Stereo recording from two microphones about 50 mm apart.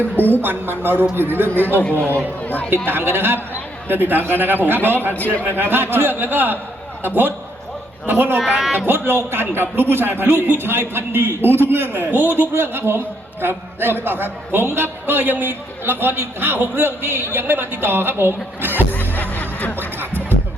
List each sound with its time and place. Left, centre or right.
0.0 s a man's voice: right
1.8 s speech: left
2.8 s a man's voice: right
5.1 s speech: left
5.4 s a man's voice: right
19.1 s music: left
19.7 s music: right